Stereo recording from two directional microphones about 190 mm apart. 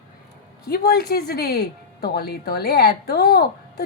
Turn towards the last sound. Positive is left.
turn(degrees=55)  # may be behind; listen again after turning